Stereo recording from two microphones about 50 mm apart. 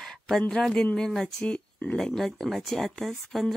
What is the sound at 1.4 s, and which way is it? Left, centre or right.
Speech, left.